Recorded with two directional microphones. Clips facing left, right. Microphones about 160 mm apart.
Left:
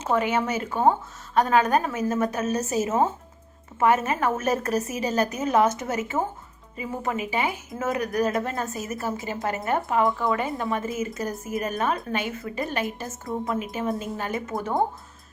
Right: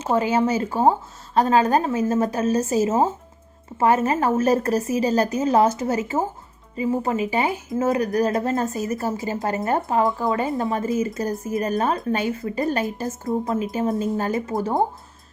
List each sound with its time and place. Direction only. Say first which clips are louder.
0.1 s a woman's voice: right 4 dB; 30° right (ahead or behind)
13.2 s speech: right 4 dB; 25° right (ahead or behind)
14.2 s speech: right 6 dB; 35° right (ahead or behind)